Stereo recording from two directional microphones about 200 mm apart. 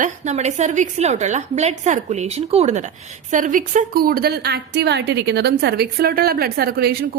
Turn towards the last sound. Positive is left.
turn(degrees=-50)  # may be behind; listen again after turning